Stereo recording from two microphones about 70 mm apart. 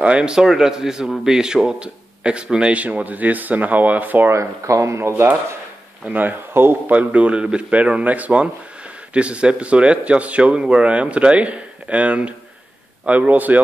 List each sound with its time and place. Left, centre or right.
0.0 s a man's voice: centre
4.3 s speech: right
6.0 s speech: right
6.9 s a man's voice: centre